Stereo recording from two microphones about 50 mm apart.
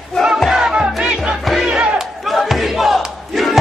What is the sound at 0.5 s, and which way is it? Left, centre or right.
Music, centre.